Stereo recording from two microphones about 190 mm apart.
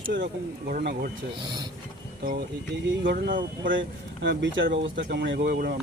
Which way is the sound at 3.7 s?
70° right (ahead or behind).